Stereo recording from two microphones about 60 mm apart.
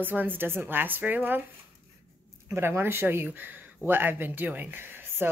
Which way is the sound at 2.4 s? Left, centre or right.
Right.